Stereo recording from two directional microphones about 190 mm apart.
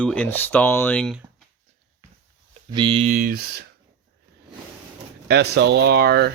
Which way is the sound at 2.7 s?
25° right (ahead or behind).